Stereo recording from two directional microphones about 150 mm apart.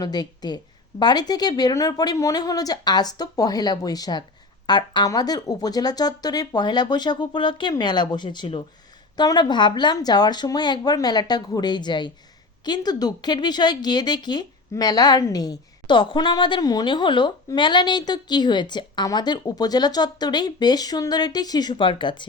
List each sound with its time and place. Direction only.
0.0 s speech: 30° left (ahead or behind)